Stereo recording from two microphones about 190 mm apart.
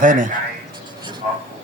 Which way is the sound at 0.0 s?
45° right (ahead or behind).